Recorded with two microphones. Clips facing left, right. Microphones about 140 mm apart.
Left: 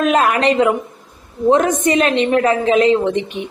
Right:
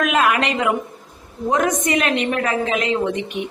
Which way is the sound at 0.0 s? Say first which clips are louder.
Left 4 dB; 35° left (ahead or behind).